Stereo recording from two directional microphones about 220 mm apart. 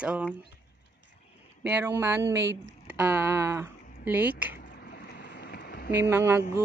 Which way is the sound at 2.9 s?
5° right (ahead or behind).